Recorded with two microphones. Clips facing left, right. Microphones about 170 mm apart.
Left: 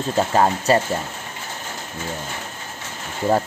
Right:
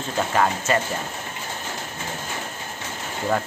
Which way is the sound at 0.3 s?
30° left (ahead or behind).